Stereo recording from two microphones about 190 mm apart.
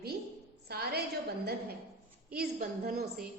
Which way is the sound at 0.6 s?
55° right (ahead or behind).